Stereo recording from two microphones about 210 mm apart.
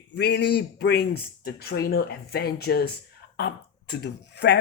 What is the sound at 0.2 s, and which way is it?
A man's voice, 55° left (ahead or behind).